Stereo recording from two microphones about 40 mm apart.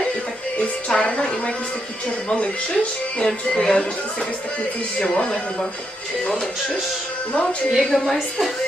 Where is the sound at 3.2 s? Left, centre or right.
Centre.